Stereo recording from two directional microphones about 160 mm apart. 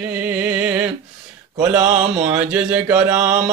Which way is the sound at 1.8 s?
50° right (ahead or behind).